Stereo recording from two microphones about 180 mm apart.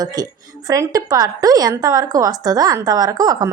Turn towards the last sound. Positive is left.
turn(degrees=-20)  # may be behind; listen again after turning